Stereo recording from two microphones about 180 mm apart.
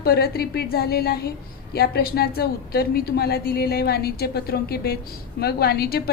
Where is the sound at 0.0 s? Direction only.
60° left (ahead or behind).